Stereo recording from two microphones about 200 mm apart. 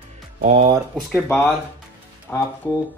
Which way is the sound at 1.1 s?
10° left (ahead or behind).